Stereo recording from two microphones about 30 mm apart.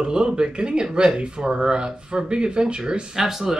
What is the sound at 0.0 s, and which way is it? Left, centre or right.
Speech, right.